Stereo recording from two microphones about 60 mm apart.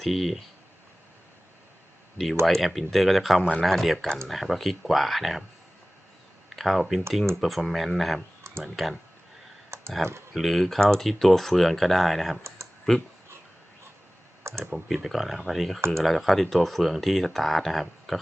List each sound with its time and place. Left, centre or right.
0.0 s speech: centre
2.5 s speech: centre
6.6 s speech: centre
9.6 s computer keyboard: right
10.3 s speech: centre
12.4 s speech: right
12.9 s speech: centre
14.6 s speech: centre